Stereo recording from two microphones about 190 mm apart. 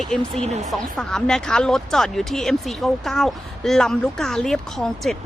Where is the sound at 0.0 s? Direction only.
5° left (ahead or behind).